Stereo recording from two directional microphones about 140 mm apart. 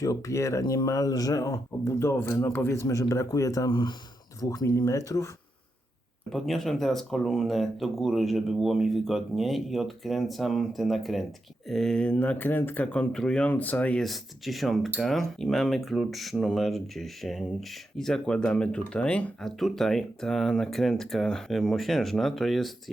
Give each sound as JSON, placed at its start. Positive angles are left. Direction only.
{"t": 0.0, "sound": "speech", "side_deg": 20}
{"t": 6.3, "sound": "speech", "side_deg": 0}